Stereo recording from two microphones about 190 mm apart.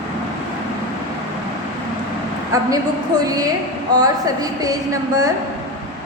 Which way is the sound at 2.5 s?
20° right (ahead or behind).